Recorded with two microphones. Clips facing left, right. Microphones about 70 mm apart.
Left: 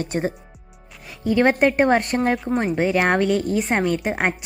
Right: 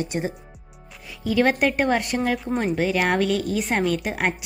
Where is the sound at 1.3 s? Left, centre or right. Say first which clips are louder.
Left 3 dB; left.